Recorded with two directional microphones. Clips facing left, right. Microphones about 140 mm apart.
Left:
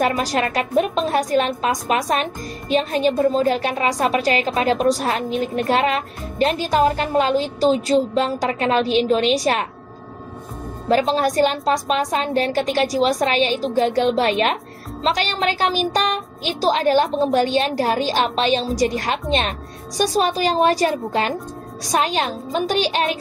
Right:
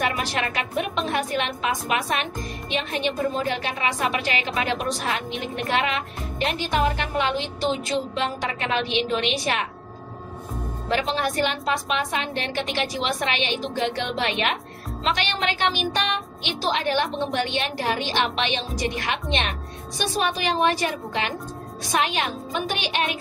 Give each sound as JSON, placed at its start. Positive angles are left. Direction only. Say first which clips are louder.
{"t": 0.0, "sound": "a woman's voice", "louder": "left 6 dB", "side_deg": 40}
{"t": 10.9, "sound": "a woman's voice", "louder": "left 7 dB", "side_deg": 40}